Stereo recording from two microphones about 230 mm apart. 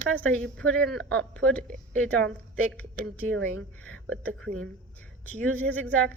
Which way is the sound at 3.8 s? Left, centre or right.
Centre.